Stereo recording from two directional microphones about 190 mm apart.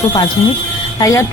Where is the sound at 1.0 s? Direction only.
20° left (ahead or behind).